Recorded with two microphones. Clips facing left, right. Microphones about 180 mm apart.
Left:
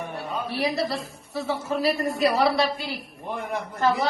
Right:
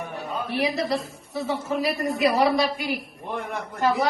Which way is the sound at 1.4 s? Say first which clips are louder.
Even; 15° right (ahead or behind).